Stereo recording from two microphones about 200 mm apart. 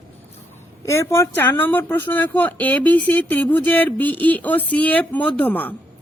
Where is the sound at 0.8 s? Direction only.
15° left (ahead or behind).